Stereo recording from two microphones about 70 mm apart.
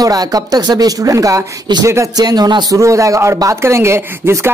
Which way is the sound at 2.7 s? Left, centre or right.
Right.